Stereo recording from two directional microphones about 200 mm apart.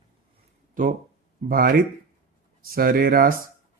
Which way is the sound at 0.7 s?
40° right (ahead or behind).